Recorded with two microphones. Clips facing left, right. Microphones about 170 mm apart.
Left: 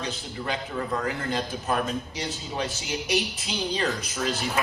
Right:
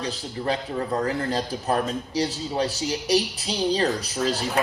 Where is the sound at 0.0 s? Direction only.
35° right (ahead or behind).